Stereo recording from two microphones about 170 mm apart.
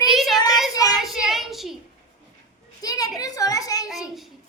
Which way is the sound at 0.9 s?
Centre (ahead or behind).